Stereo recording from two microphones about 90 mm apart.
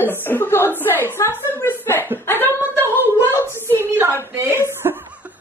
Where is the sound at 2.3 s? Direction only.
20° left (ahead or behind).